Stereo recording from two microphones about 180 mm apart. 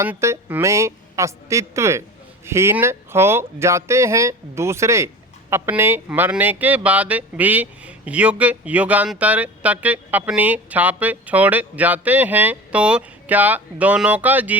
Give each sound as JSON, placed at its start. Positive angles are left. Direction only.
{"t": 0.0, "sound": "speech", "side_deg": -15}